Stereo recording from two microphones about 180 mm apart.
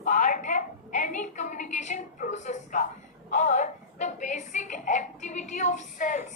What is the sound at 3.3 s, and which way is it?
A woman's voice, 40° left (ahead or behind).